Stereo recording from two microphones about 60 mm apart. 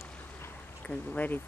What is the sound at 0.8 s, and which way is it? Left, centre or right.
Speech, left.